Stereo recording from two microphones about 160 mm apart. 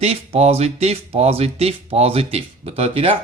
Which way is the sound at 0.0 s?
40° right (ahead or behind).